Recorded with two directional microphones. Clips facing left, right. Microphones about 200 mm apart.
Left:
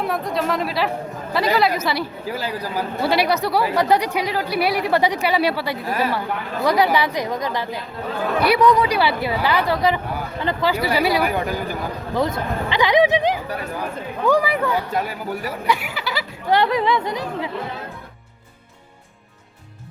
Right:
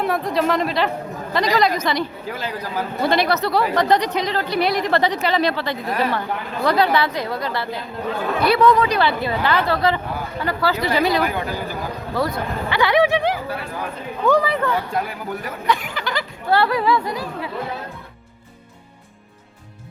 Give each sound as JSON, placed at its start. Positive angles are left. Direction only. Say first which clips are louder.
{"t": 0.0, "sound": "speech", "louder": "right 2 dB", "side_deg": 0}
{"t": 16.6, "sound": "speech", "louder": "even", "side_deg": 20}